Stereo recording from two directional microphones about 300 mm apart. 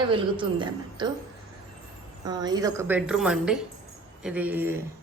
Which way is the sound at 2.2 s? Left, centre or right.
Centre.